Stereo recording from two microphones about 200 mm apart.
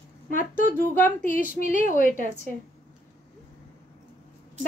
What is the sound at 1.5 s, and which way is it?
Speech, 45° left (ahead or behind).